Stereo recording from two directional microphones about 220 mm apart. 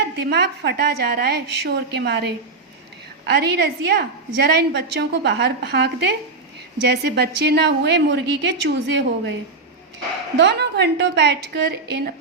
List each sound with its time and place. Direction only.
0.2 s a woman's voice: 50° right (ahead or behind)
3.2 s a woman's voice: 50° right (ahead or behind)
10.3 s a woman's voice: 50° right (ahead or behind)